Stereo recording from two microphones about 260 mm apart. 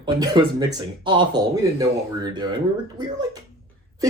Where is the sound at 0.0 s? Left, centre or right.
Centre.